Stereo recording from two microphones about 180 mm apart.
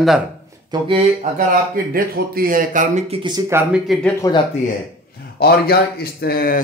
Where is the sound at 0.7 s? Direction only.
30° right (ahead or behind).